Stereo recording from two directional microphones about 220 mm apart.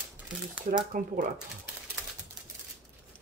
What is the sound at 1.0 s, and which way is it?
Speech, 40° right (ahead or behind).